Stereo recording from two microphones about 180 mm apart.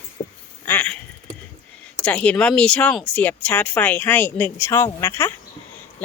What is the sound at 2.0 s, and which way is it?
Speech, 5° left (ahead or behind).